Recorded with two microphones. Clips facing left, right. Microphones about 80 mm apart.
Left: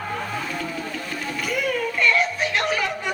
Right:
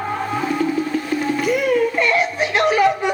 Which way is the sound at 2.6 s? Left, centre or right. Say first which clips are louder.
Right 11 dB; right.